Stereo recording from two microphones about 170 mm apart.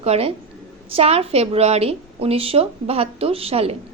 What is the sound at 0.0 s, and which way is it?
A woman's voice, 35° right (ahead or behind).